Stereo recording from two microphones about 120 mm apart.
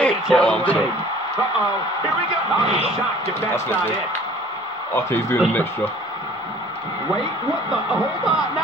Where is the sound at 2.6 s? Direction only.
55° right (ahead or behind).